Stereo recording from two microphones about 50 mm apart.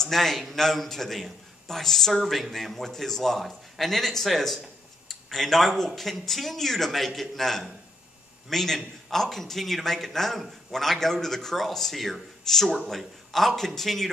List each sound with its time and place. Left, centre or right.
0.0 s a man's voice: centre